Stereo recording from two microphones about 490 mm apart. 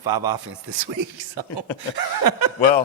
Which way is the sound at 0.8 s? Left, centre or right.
Right.